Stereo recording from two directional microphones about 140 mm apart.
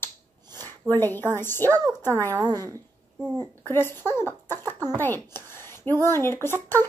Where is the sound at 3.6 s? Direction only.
15° left (ahead or behind).